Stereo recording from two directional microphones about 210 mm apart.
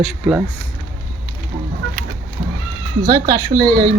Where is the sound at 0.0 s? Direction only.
5° right (ahead or behind).